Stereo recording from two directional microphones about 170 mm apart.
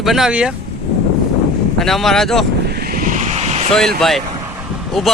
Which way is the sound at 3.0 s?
50° right (ahead or behind).